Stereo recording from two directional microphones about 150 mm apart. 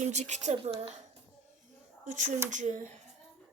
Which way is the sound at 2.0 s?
55° right (ahead or behind).